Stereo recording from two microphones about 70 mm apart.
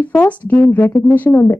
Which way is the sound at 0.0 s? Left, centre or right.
Left.